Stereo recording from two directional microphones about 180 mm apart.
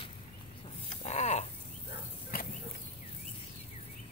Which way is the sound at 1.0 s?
35° left (ahead or behind).